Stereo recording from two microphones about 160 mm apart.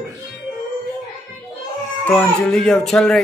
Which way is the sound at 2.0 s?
5° left (ahead or behind).